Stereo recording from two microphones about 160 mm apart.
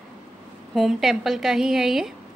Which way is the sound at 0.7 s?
Centre (ahead or behind).